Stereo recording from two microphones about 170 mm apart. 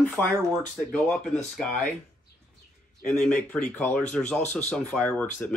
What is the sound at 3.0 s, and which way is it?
Speech, 5° left (ahead or behind).